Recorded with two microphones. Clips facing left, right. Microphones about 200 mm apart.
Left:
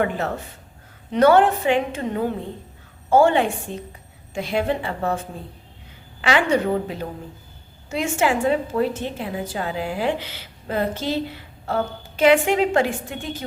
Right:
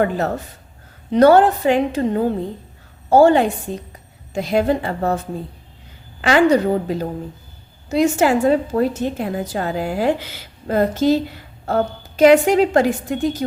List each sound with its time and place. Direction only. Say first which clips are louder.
1.1 s a woman's voice: right 4 dB; 40° right (ahead or behind)
6.2 s a woman's voice: right 5 dB; 40° right (ahead or behind)